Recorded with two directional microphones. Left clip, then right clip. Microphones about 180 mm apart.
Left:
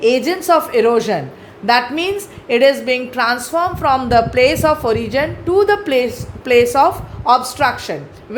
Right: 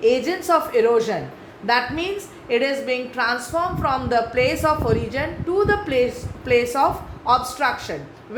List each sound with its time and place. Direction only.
0.0 s a woman's voice: 50° left (ahead or behind)